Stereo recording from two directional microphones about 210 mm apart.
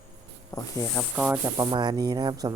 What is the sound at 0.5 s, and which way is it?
Speech, 15° left (ahead or behind).